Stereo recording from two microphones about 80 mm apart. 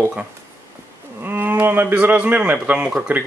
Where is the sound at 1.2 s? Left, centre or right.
Right.